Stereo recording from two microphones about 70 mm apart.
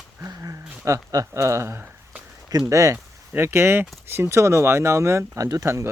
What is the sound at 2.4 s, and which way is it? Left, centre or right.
Speech, right.